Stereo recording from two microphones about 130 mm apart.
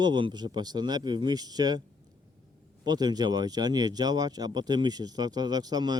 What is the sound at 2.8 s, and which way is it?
Speech, 30° right (ahead or behind).